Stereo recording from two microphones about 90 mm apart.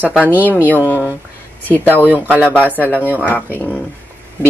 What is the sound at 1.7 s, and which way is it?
Speech, 20° left (ahead or behind).